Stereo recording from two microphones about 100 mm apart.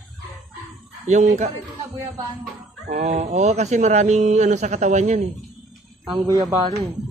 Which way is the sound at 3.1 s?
90° right.